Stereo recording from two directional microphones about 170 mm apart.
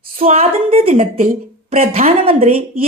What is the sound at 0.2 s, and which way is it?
Speech, 40° right (ahead or behind).